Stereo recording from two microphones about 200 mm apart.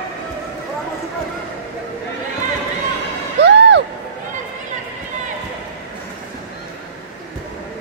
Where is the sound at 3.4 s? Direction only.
60° right (ahead or behind).